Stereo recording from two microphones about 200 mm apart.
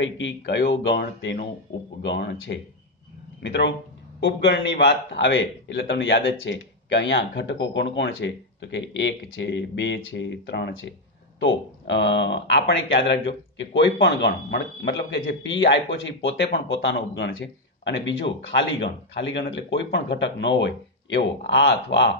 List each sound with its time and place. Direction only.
0.0 s a man's voice: 65° left (ahead or behind)